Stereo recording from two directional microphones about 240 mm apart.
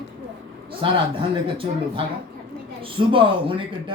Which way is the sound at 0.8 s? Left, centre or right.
Right.